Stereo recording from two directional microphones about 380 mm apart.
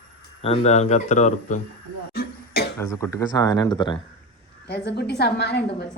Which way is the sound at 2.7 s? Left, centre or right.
Centre.